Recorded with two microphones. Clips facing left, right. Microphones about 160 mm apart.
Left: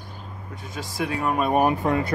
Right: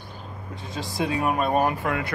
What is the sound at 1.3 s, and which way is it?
Speech, 10° left (ahead or behind).